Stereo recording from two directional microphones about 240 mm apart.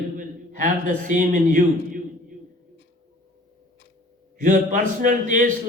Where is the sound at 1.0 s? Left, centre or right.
Right.